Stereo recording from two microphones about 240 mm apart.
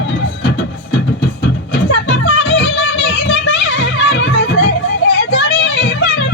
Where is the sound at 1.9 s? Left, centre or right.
Left.